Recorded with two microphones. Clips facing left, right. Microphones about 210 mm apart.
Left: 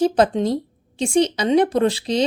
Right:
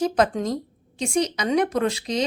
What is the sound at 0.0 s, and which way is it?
A woman's voice, 30° left (ahead or behind).